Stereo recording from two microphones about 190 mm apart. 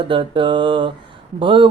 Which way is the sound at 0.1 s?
25° right (ahead or behind).